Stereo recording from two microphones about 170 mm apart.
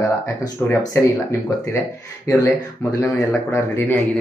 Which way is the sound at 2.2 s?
20° left (ahead or behind).